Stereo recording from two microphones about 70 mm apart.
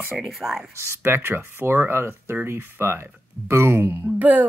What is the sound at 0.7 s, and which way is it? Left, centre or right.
Speech, right.